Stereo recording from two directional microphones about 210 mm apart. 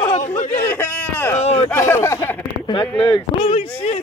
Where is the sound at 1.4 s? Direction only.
30° left (ahead or behind).